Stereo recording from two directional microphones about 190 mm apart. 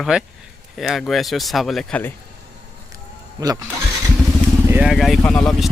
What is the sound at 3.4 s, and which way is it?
Speech, 20° right (ahead or behind).